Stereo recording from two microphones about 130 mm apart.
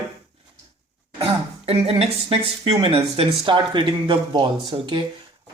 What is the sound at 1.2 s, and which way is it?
Speech, 45° right (ahead or behind).